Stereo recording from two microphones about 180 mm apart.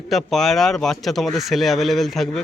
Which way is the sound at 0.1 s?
Centre (ahead or behind).